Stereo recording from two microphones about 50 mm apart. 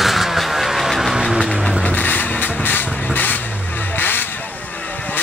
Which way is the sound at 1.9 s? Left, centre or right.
Left.